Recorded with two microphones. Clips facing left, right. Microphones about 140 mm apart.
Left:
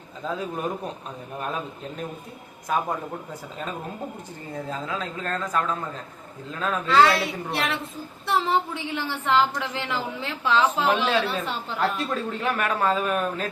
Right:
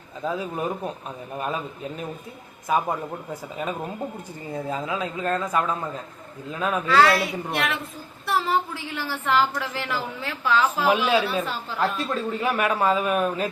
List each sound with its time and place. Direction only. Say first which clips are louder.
0.2 s a man's voice: right 2 dB; 10° right (ahead or behind)
4.5 s speech: right 3 dB; 10° right (ahead or behind)
6.8 s a woman's voice: even; 25° left (ahead or behind)
10.6 s speech: right 1 dB; 10° right (ahead or behind)